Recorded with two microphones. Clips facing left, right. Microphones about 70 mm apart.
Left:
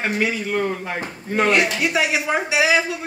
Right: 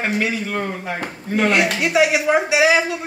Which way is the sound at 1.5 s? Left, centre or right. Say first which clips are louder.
Right 1 dB; centre.